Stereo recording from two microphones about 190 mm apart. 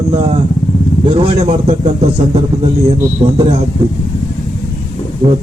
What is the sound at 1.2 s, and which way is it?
Music, 30° right (ahead or behind).